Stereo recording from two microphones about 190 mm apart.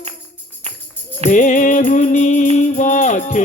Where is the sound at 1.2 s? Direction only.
40° left (ahead or behind).